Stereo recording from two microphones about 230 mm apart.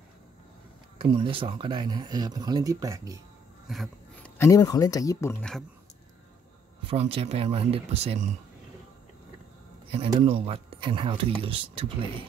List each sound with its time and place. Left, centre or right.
0.9 s speech: right
3.6 s a sound: centre
4.4 s speech: centre
6.9 s speech: right
9.8 s speech: right